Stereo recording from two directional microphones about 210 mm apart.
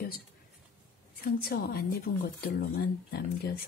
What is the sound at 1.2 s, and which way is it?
Speech, 45° left (ahead or behind).